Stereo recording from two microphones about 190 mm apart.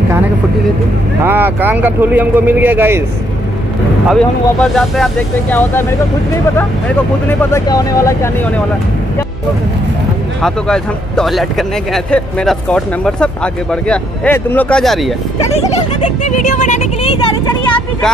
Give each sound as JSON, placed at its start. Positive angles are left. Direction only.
{"t": 1.2, "sound": "speech", "side_deg": -10}
{"t": 4.1, "sound": "speech", "side_deg": 0}
{"t": 7.2, "sound": "speech", "side_deg": 15}
{"t": 10.4, "sound": "speech", "side_deg": 5}
{"t": 15.5, "sound": "speech", "side_deg": 35}